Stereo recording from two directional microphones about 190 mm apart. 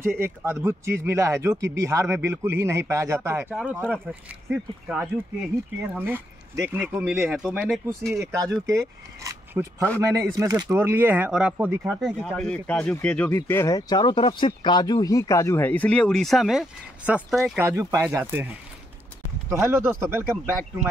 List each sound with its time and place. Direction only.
0.0 s speech: 10° right (ahead or behind)
8.1 s speech: 15° right (ahead or behind)
11.9 s speech: 5° left (ahead or behind)
17.6 s speech: 15° right (ahead or behind)
19.7 s speech: 10° right (ahead or behind)